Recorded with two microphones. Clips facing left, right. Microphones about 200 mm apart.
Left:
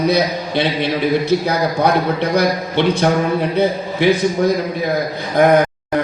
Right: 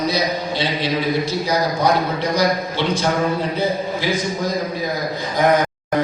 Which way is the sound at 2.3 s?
60° left (ahead or behind).